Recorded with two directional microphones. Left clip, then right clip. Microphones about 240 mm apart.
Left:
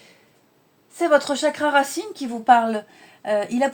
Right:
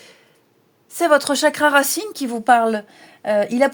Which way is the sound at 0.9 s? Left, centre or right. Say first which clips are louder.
Right 3 dB; right.